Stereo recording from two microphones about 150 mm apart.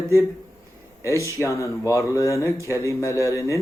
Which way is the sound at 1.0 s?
20° left (ahead or behind).